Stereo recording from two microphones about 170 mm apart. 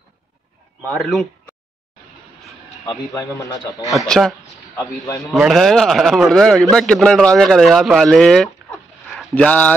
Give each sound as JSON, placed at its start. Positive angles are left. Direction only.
{"t": 0.8, "sound": "speech", "side_deg": 0}
{"t": 2.8, "sound": "a man's voice", "side_deg": 20}
{"t": 3.9, "sound": "speech", "side_deg": 0}
{"t": 4.7, "sound": "a man's voice", "side_deg": 20}
{"t": 5.2, "sound": "speech", "side_deg": 0}